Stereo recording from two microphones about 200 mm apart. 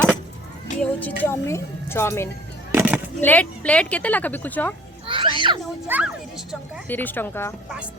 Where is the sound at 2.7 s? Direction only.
10° right (ahead or behind).